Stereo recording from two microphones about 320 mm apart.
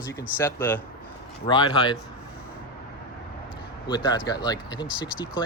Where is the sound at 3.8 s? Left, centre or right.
Centre.